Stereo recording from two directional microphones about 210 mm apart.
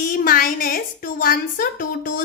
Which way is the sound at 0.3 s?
45° left (ahead or behind).